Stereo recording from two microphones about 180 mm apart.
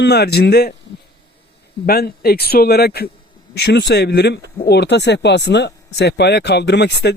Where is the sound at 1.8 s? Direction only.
60° left (ahead or behind).